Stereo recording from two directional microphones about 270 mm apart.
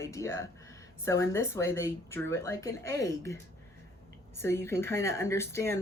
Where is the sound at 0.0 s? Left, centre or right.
Centre.